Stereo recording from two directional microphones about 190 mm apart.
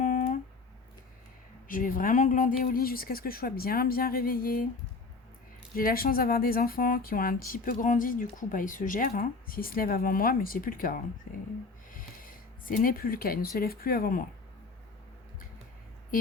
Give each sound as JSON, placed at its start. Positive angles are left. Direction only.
{"t": 0.0, "sound": "a sound", "side_deg": 45}
{"t": 1.6, "sound": "speech", "side_deg": 45}
{"t": 5.7, "sound": "speech", "side_deg": 50}